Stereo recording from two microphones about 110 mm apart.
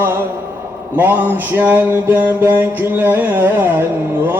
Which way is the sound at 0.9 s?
15° right (ahead or behind).